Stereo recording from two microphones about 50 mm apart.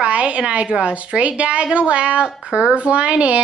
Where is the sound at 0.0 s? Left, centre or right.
Right.